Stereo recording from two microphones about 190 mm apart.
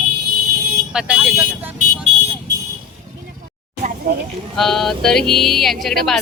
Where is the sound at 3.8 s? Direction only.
50° right (ahead or behind).